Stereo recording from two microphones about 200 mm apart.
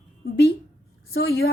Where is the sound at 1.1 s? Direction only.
50° left (ahead or behind).